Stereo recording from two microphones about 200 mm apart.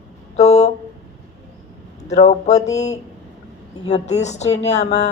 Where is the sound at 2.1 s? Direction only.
35° left (ahead or behind).